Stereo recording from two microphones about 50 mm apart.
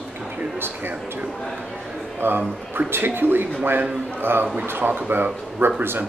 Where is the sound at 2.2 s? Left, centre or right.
Right.